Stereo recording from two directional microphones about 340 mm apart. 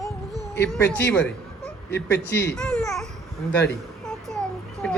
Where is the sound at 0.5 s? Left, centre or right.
Centre.